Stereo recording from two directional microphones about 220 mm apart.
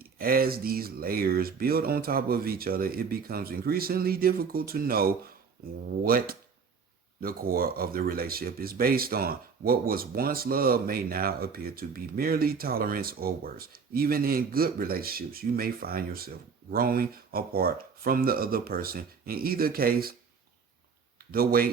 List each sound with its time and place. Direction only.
0.0 s speech: 40° right (ahead or behind)
21.3 s speech: 40° right (ahead or behind)